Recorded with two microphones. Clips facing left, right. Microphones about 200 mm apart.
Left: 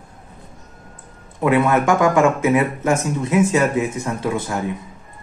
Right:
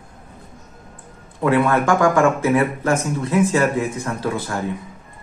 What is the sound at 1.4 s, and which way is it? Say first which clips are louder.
Speech: left 1 dB; 20° left (ahead or behind).